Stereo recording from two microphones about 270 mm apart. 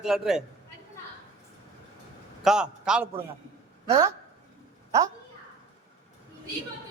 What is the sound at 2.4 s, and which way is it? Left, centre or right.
A man's voice, centre.